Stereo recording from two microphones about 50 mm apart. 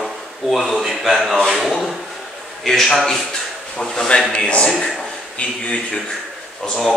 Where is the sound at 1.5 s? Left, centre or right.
Centre.